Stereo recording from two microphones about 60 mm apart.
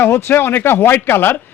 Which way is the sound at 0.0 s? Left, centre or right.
Left.